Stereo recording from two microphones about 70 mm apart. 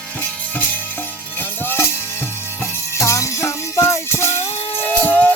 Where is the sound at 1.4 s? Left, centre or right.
Left.